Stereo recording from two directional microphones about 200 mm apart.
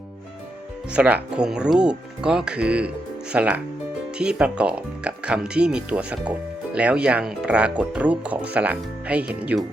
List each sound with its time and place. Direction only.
0.9 s speech: 5° right (ahead or behind)